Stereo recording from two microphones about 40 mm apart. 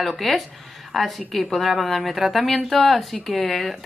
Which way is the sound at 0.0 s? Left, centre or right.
Centre.